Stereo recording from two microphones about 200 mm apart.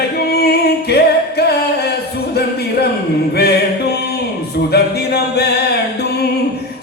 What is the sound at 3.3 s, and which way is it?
Music, 55° left (ahead or behind).